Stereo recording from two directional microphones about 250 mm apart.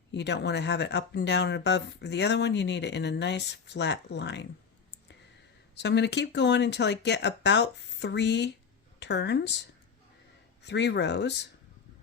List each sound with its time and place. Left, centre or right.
0.1 s speech: left
5.7 s speech: left